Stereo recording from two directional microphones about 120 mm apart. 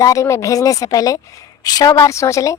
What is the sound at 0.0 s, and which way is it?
A woman's voice, 25° left (ahead or behind).